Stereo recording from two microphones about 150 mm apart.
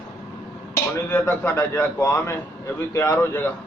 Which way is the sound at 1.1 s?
15° left (ahead or behind).